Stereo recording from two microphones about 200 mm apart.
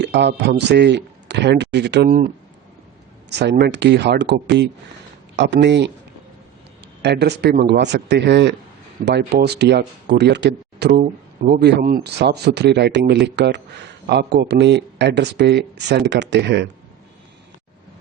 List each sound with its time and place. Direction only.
0.0 s speech: 60° right (ahead or behind)
3.2 s speech: 60° right (ahead or behind)
7.0 s speech: 55° right (ahead or behind)